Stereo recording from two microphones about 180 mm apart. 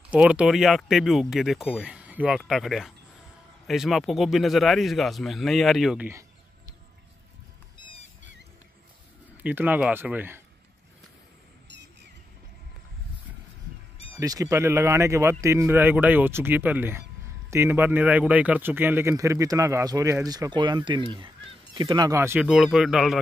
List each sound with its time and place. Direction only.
0.1 s speech: 5° right (ahead or behind)
6.0 s a sound: 15° right (ahead or behind)
7.7 s rodents: 90° right
9.4 s speech: 10° right (ahead or behind)
11.6 s a sound: 75° right (ahead or behind)
14.2 s speech: 20° right (ahead or behind); by 23.2 s centre (ahead or behind)